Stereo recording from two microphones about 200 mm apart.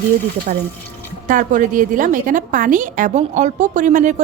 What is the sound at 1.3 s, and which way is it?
A woman's voice, 40° right (ahead or behind).